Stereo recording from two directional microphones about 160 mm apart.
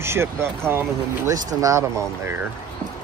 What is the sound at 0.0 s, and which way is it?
Speech, 15° right (ahead or behind).